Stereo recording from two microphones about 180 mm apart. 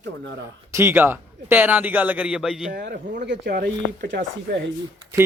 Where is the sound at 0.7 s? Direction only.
10° right (ahead or behind).